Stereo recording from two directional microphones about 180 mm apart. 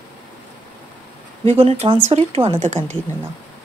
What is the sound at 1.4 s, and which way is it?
A woman's voice, 35° right (ahead or behind).